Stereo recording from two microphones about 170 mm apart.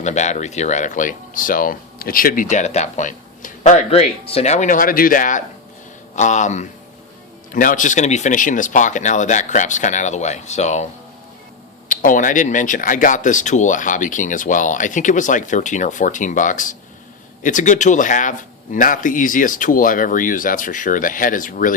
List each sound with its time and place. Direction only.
0.0 s speech: 45° left (ahead or behind)
11.9 s speech: 50° left (ahead or behind)